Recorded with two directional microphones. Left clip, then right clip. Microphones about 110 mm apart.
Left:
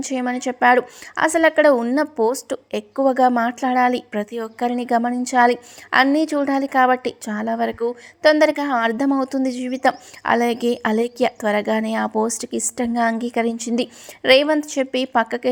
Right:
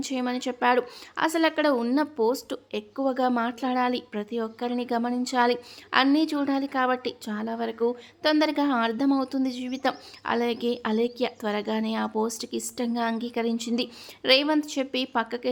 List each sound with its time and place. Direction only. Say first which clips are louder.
0.0 s a woman's voice: left 6 dB; 35° left (ahead or behind)